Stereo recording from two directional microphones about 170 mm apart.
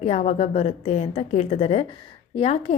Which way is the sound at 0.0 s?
40° left (ahead or behind).